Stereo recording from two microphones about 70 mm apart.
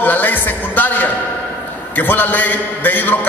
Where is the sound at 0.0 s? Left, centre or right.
Left.